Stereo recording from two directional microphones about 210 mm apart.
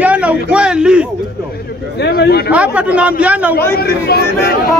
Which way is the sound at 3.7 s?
50° left (ahead or behind).